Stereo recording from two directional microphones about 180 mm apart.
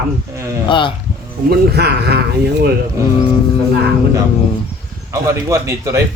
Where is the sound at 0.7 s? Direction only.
25° left (ahead or behind).